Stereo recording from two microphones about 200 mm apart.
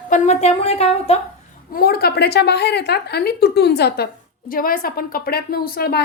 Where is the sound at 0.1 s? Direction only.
35° left (ahead or behind).